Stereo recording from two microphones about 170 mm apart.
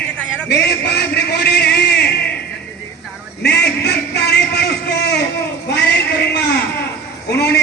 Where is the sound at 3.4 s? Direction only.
75° left (ahead or behind).